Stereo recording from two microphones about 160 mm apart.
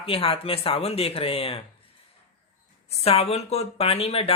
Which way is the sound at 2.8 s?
40° left (ahead or behind).